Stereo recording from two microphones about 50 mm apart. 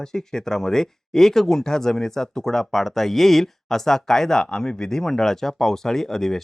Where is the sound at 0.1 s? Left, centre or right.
Centre.